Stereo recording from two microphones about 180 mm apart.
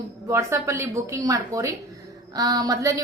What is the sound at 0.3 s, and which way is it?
A woman's voice, 15° right (ahead or behind).